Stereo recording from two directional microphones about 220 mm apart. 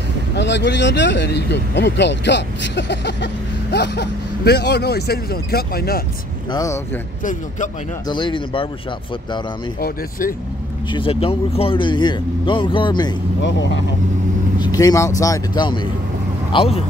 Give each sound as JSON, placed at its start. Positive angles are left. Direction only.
{"t": 0.4, "sound": "speech", "side_deg": 55}
{"t": 6.5, "sound": "speech", "side_deg": 15}
{"t": 8.1, "sound": "speech", "side_deg": 20}
{"t": 9.8, "sound": "speech", "side_deg": 40}
{"t": 10.9, "sound": "speech", "side_deg": 25}
{"t": 13.4, "sound": "speech", "side_deg": 55}
{"t": 14.6, "sound": "speech", "side_deg": 15}